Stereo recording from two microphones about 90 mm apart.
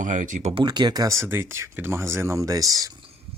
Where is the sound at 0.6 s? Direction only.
55° right (ahead or behind).